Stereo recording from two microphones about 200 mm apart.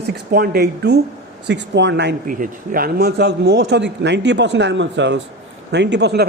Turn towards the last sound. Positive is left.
turn(degrees=-55)  # may be behind; listen again after turning